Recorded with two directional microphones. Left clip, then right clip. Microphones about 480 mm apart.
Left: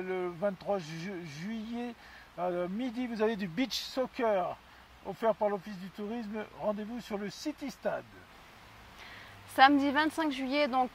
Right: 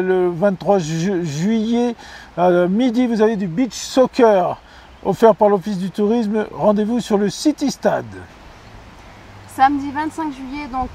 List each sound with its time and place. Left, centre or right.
0.0 s speech: right
3.3 s speech: centre
3.9 s speech: right
9.6 s a woman's voice: left